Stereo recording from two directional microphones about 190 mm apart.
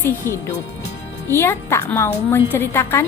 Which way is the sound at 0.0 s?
15° left (ahead or behind).